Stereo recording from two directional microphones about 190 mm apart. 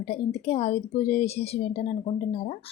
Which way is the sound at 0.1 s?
30° left (ahead or behind).